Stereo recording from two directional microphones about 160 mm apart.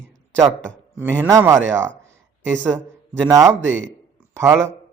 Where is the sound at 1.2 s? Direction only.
20° right (ahead or behind).